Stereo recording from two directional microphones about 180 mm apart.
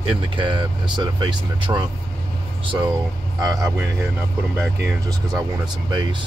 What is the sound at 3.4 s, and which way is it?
Speech, 20° right (ahead or behind).